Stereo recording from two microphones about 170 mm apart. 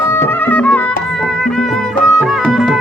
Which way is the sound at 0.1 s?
10° left (ahead or behind).